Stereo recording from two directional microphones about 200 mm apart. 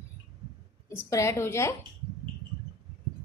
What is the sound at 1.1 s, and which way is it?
Speech, 15° left (ahead or behind).